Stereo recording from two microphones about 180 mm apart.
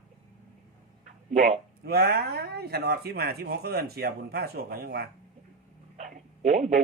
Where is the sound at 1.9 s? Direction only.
60° right (ahead or behind).